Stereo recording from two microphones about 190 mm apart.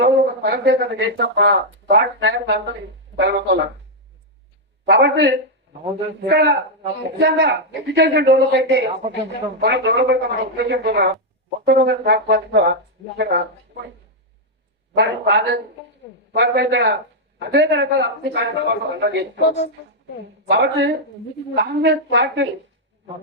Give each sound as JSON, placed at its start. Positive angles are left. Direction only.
{"t": 0.0, "sound": "speech", "side_deg": -60}
{"t": 4.9, "sound": "speech", "side_deg": -65}
{"t": 14.9, "sound": "speech", "side_deg": -65}
{"t": 20.5, "sound": "speech", "side_deg": -65}